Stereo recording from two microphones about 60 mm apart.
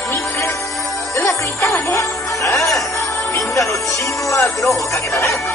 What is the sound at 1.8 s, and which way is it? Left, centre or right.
Music, left.